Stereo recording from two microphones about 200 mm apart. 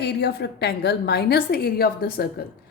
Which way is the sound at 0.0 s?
55° left (ahead or behind).